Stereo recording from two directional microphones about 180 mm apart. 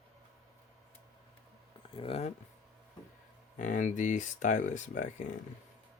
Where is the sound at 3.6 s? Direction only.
45° left (ahead or behind).